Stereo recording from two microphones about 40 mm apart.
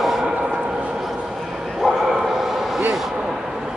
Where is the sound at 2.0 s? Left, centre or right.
Centre.